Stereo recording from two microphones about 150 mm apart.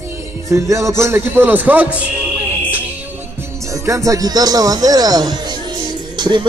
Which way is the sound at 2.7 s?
10° right (ahead or behind).